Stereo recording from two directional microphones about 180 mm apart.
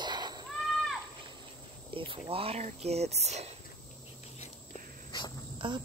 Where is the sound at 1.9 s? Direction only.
30° right (ahead or behind).